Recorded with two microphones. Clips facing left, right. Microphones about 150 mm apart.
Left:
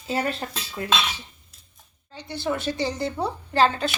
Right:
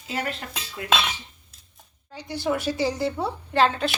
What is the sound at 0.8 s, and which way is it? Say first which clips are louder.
Cutlery: left 4 dB; 35° left (ahead or behind).